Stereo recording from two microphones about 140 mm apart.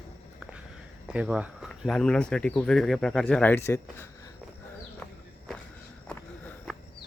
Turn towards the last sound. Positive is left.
turn(degrees=0)  # may be behind; listen again after turning